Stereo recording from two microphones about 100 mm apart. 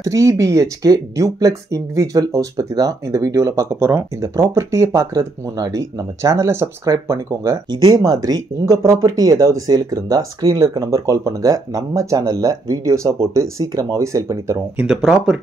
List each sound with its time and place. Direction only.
0.0 s speech: 30° right (ahead or behind)
7.7 s speech: 45° right (ahead or behind); by 14.6 s 30° right (ahead or behind)
14.8 s speech: 5° right (ahead or behind)